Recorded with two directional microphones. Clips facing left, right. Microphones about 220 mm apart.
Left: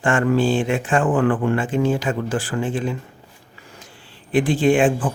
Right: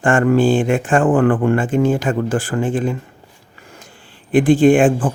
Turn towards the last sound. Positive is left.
turn(degrees=-50)  # may be behind; listen again after turning